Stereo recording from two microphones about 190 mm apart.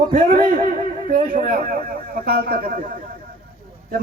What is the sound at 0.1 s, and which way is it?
A man's voice, 45° right (ahead or behind).